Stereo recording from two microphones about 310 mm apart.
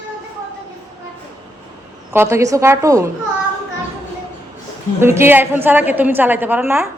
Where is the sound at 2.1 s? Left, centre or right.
Centre.